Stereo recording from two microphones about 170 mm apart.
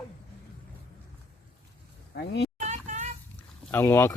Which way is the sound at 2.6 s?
45° right (ahead or behind).